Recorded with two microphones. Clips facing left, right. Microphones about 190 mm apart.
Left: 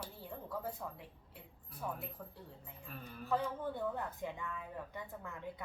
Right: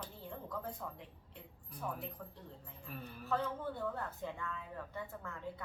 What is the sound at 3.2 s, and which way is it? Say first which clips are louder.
Speech: left 1 dB; 15° left (ahead or behind).